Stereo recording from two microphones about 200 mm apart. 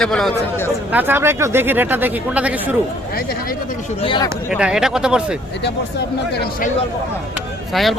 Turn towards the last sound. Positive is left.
turn(degrees=0)  # may be behind; listen again after turning